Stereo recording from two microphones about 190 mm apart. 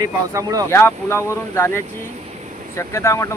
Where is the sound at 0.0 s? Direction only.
20° right (ahead or behind).